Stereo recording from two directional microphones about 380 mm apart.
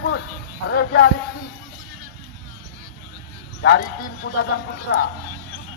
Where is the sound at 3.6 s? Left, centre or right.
Left.